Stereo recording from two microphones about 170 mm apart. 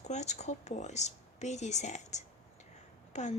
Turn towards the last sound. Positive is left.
turn(degrees=45)  # may be behind; listen again after turning